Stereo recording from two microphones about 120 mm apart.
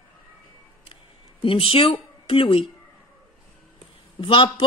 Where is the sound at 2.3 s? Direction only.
50° left (ahead or behind).